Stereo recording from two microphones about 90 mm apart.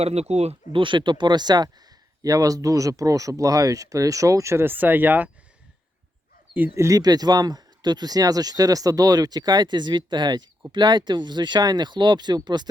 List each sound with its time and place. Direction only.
0.7 s speech: 65° right (ahead or behind); by 1.7 s 50° right (ahead or behind)
2.2 s speech: 40° right (ahead or behind); by 5.3 s 20° right (ahead or behind)
6.7 s speech: 35° right (ahead or behind); by 12.6 s 55° right (ahead or behind)